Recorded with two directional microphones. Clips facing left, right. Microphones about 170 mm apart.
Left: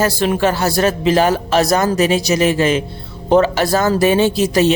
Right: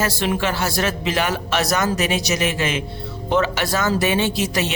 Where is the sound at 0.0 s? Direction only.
40° left (ahead or behind).